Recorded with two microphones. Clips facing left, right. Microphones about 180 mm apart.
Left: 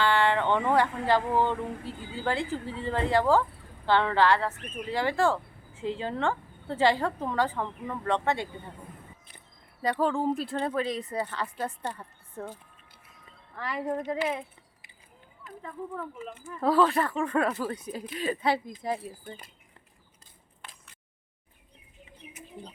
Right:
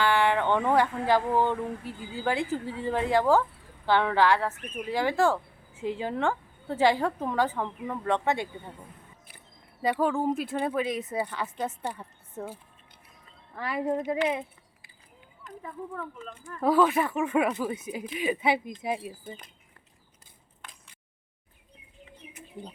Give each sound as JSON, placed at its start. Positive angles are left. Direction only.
{"t": 0.0, "sound": "a woman's voice", "side_deg": -10}
{"t": 9.9, "sound": "a woman's voice", "side_deg": -5}
{"t": 13.6, "sound": "a woman's voice", "side_deg": -10}
{"t": 16.0, "sound": "a woman's voice", "side_deg": 5}
{"t": 19.2, "sound": "speech", "side_deg": 0}